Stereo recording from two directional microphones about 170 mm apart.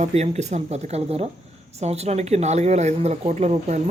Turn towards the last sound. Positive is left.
turn(degrees=-40)  # may be behind; listen again after turning